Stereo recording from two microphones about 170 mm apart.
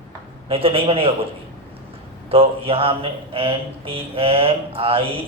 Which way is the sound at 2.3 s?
35° right (ahead or behind).